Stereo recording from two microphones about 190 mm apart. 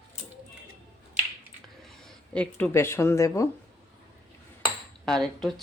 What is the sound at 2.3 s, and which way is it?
Speech, 5° left (ahead or behind).